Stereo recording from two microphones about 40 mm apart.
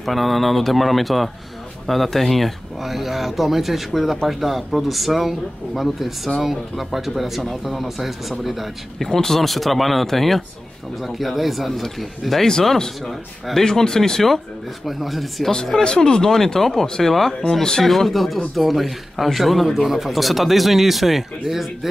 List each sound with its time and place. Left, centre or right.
0.0 s speech: centre
9.0 s speech: centre
12.4 s speech: centre
14.9 s speech: centre
15.5 s speech: centre
16.3 s speech: centre